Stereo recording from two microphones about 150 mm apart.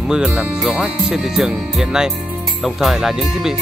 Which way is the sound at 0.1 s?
5° right (ahead or behind).